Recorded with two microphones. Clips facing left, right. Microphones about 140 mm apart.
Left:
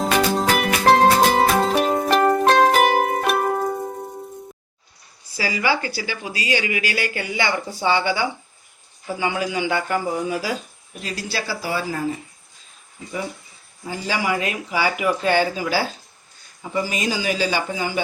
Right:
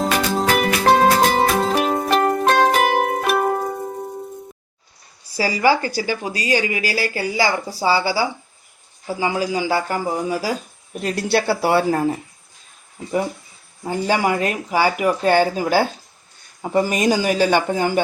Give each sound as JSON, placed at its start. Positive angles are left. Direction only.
{"t": 0.0, "sound": "music", "side_deg": 0}
{"t": 5.3, "sound": "speech", "side_deg": -40}
{"t": 11.0, "sound": "speech", "side_deg": -60}
{"t": 13.8, "sound": "speech", "side_deg": -50}